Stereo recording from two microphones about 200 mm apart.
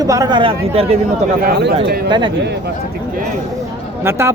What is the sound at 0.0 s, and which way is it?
Speech, 15° right (ahead or behind).